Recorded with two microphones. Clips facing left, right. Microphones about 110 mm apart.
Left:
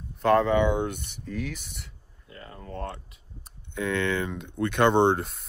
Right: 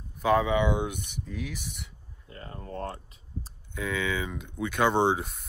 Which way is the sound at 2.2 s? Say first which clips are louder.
Right 1 dB; 30° right (ahead or behind).